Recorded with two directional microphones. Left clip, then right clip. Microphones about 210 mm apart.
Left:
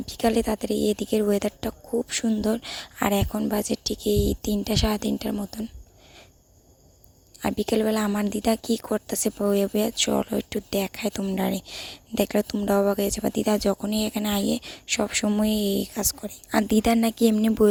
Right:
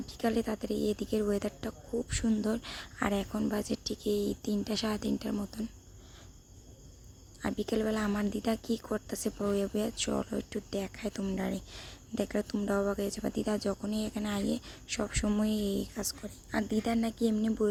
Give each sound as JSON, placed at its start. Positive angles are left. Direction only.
{"t": 0.0, "sound": "speech", "side_deg": 35}
{"t": 7.4, "sound": "speech", "side_deg": 35}